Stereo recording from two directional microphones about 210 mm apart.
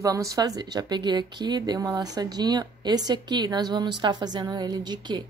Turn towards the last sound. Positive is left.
turn(degrees=-20)  # may be behind; listen again after turning